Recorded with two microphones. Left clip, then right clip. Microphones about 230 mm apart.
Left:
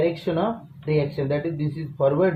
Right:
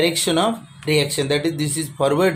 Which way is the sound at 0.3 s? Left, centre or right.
Right.